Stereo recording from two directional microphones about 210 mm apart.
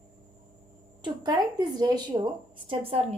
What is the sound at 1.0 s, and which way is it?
A woman's voice, 20° right (ahead or behind).